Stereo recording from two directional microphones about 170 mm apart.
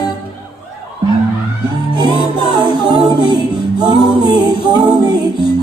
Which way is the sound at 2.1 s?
25° right (ahead or behind).